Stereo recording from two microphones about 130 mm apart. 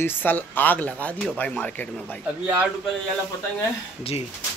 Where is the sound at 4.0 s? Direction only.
50° left (ahead or behind).